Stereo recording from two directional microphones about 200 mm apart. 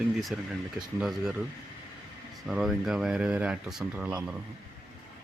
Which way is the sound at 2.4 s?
Centre (ahead or behind).